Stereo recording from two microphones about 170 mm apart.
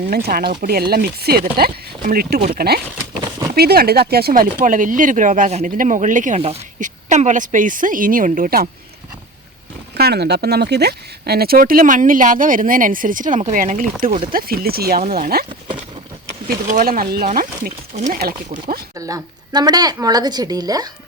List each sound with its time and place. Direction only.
0.1 s speech: 60° right (ahead or behind)
10.0 s speech: 70° right (ahead or behind); by 13.8 s 50° right (ahead or behind)
14.3 s speech: 60° right (ahead or behind)
16.6 s speech: 50° right (ahead or behind)
18.2 s speech: 65° right (ahead or behind)
18.9 s a woman's voice: 20° right (ahead or behind)